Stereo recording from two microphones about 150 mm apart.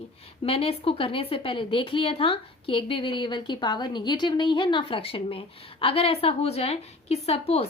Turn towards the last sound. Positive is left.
turn(degrees=40)  # may be behind; listen again after turning